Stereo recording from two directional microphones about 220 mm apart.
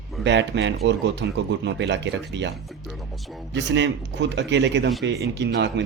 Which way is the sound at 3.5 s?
55° right (ahead or behind).